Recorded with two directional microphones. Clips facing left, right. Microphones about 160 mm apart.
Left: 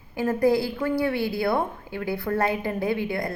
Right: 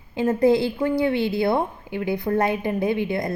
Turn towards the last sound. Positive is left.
turn(degrees=-20)  # may be behind; listen again after turning